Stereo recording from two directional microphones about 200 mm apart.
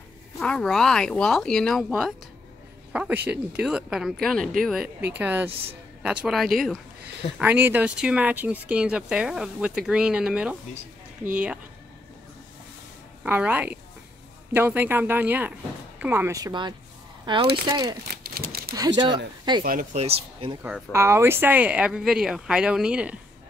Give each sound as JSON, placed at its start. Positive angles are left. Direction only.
{"t": 0.4, "sound": "speech", "side_deg": 5}
{"t": 5.1, "sound": "speech", "side_deg": -10}
{"t": 13.2, "sound": "speech", "side_deg": -5}
{"t": 18.2, "sound": "a sound", "side_deg": -50}
{"t": 18.8, "sound": "speech", "side_deg": -20}
{"t": 19.6, "sound": "speech", "side_deg": -45}
{"t": 20.6, "sound": "speech", "side_deg": -10}